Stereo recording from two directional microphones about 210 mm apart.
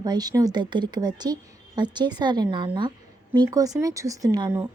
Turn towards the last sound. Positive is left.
turn(degrees=-20)  # may be behind; listen again after turning